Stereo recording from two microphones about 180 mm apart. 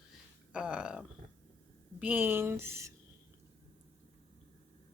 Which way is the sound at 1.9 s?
10° right (ahead or behind).